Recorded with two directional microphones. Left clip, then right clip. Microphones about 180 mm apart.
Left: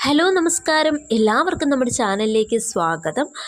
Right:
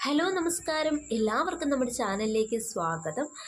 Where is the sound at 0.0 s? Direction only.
45° left (ahead or behind).